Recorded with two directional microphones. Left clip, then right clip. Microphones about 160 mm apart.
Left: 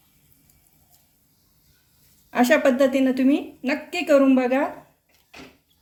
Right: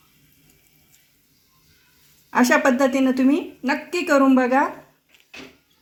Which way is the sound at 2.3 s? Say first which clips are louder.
Right 1 dB; 40° right (ahead or behind).